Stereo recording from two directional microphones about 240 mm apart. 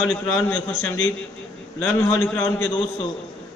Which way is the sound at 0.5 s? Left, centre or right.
Left.